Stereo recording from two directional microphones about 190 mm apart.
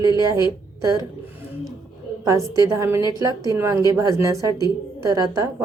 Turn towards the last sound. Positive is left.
turn(degrees=-20)  # may be behind; listen again after turning